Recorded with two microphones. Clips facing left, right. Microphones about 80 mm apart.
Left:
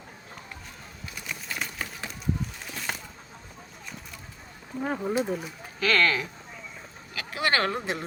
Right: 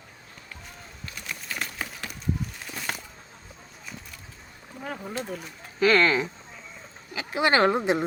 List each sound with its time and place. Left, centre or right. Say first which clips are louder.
1.3 s a sound: even; centre
4.8 s speech: left 6 dB; centre
5.8 s speech: right 4 dB; right